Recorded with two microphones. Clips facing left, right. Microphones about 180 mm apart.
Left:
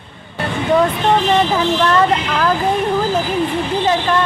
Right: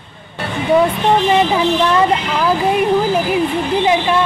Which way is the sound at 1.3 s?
10° right (ahead or behind).